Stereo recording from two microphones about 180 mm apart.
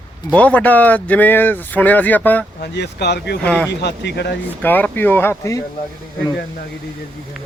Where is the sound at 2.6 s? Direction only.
65° left (ahead or behind).